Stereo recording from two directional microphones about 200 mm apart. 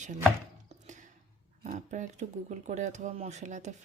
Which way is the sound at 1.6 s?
35° right (ahead or behind).